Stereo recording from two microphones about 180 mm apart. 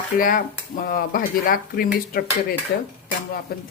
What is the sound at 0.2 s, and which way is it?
Speech, 50° left (ahead or behind).